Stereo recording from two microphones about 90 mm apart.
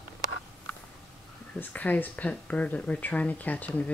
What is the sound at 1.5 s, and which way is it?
Speech, 20° left (ahead or behind).